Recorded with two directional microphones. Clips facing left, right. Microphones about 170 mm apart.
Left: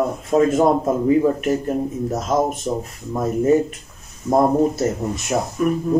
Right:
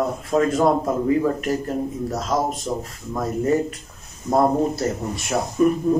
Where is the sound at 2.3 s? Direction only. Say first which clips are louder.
Left 4 dB; 25° left (ahead or behind).